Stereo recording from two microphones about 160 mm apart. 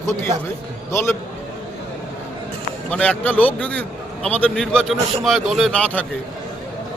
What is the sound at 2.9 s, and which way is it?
A man's voice, 10° left (ahead or behind).